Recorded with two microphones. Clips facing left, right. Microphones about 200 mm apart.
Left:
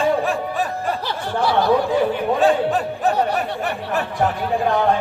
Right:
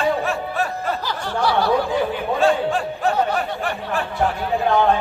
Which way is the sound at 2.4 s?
20° left (ahead or behind).